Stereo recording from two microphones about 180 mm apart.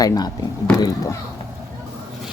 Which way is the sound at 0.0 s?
20° left (ahead or behind).